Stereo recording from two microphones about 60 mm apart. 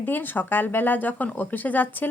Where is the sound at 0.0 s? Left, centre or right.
Left.